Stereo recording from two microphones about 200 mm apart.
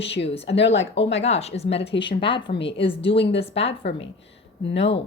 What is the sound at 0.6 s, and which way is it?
Speech, 65° left (ahead or behind).